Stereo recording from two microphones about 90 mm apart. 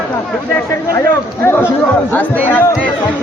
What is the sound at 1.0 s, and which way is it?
Speech, 25° left (ahead or behind).